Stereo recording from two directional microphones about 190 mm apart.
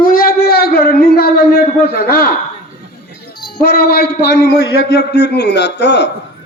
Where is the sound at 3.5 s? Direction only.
55° left (ahead or behind).